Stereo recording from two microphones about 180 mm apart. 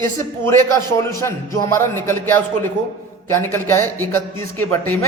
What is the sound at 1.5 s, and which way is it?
A man's voice, 15° left (ahead or behind).